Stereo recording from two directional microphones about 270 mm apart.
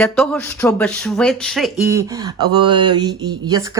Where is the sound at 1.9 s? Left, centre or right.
Centre.